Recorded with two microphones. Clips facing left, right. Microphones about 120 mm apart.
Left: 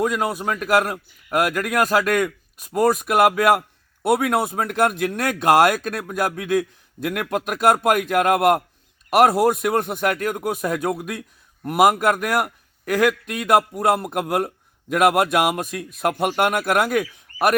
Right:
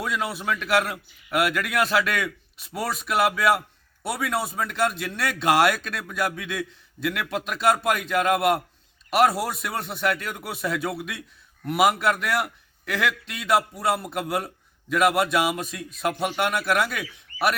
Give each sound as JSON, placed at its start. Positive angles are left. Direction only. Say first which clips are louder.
{"t": 0.0, "sound": "a man's voice", "louder": "left 6 dB", "side_deg": 45}